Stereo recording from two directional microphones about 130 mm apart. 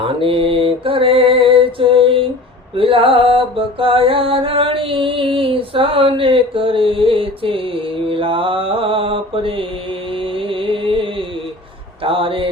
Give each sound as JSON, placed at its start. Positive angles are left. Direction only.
{"t": 0.2, "sound": "mantra", "side_deg": -45}
{"t": 2.7, "sound": "music", "side_deg": -45}
{"t": 12.0, "sound": "speech", "side_deg": -40}